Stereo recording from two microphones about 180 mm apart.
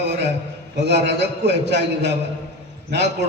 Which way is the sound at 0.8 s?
70° right (ahead or behind).